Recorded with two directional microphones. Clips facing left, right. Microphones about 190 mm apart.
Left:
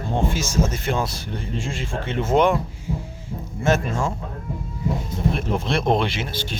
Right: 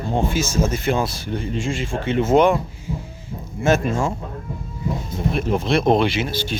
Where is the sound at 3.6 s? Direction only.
10° right (ahead or behind).